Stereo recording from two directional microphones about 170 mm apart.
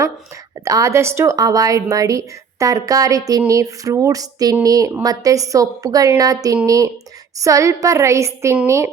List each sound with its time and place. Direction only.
0.6 s a woman's voice: 20° right (ahead or behind)